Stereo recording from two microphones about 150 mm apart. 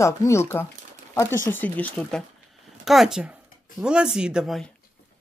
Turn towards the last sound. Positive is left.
turn(degrees=0)  # may be behind; listen again after turning